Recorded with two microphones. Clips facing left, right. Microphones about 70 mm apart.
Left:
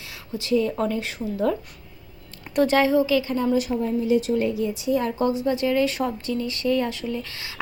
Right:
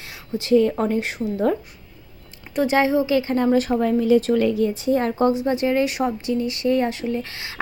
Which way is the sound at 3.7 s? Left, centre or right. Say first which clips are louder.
Right 4 dB; right.